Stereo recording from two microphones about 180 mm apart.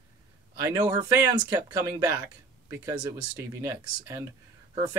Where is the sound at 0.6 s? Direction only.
15° right (ahead or behind).